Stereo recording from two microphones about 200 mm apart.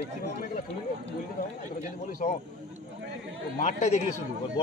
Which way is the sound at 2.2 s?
40° left (ahead or behind).